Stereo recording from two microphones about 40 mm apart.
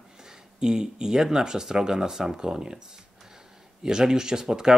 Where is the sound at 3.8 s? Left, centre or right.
Centre.